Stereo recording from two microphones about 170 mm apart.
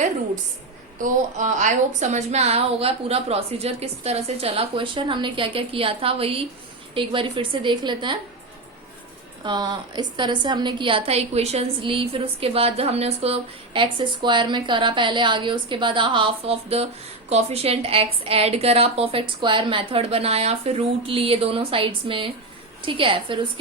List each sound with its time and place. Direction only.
0.9 s a woman's voice: 50° right (ahead or behind); by 8.2 s 25° right (ahead or behind)
9.4 s a woman's voice: 25° right (ahead or behind)